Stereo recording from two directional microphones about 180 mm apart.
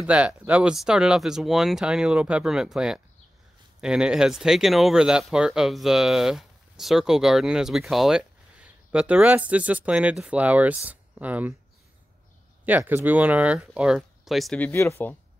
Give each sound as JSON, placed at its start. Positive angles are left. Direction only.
{"t": 0.0, "sound": "speech", "side_deg": -5}
{"t": 12.6, "sound": "speech", "side_deg": -10}